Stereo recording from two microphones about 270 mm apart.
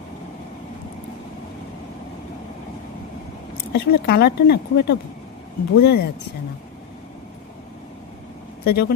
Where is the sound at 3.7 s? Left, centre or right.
Left.